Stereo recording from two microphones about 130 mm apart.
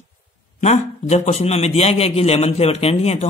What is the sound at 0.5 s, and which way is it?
A man's voice, 60° left (ahead or behind).